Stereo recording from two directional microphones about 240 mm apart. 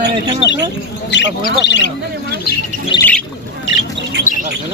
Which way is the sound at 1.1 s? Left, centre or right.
Left.